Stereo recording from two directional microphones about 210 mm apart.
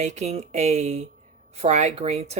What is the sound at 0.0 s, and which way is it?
Speech, 35° right (ahead or behind).